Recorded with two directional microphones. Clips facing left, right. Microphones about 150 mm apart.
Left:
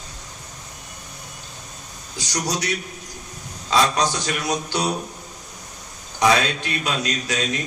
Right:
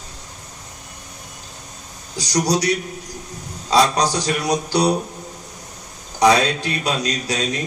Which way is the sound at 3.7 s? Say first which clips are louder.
Right 3 dB; 35° right (ahead or behind).